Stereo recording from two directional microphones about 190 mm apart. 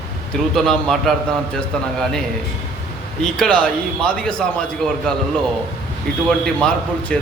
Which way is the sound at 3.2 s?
Centre (ahead or behind).